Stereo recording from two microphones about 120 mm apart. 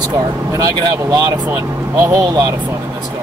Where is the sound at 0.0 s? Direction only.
35° right (ahead or behind).